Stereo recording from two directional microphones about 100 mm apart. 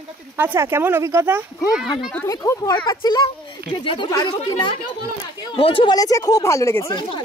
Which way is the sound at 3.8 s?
55° left (ahead or behind).